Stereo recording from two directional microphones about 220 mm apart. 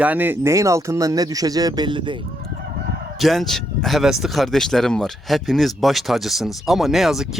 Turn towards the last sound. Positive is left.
turn(degrees=0)  # may be behind; listen again after turning